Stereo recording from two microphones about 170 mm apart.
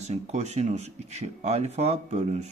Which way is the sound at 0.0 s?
40° right (ahead or behind).